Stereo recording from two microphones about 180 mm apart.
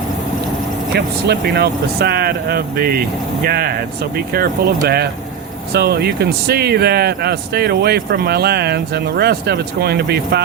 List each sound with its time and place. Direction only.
0.9 s speech: 65° right (ahead or behind)